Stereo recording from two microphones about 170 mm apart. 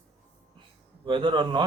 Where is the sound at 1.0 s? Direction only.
30° right (ahead or behind).